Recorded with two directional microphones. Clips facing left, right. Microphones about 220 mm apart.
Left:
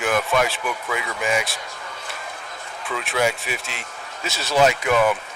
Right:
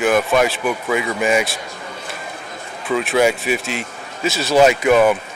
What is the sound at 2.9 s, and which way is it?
Speech, 15° right (ahead or behind).